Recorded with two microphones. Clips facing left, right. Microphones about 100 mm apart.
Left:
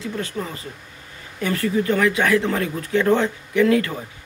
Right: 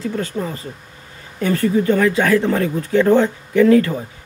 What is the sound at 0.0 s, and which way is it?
Speech, 40° right (ahead or behind).